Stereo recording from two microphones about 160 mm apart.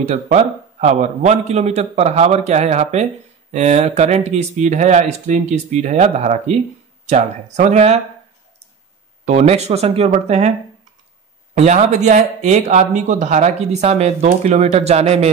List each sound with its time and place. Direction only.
0.0 s speech: 45° right (ahead or behind)
9.2 s speech: 40° right (ahead or behind)
11.5 s speech: 50° right (ahead or behind)